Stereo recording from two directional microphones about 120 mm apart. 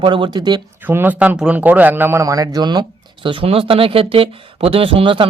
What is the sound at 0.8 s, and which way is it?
A man's voice, 15° right (ahead or behind).